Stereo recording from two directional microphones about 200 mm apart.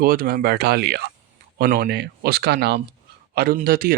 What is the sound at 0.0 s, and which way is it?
Speech, 50° right (ahead or behind).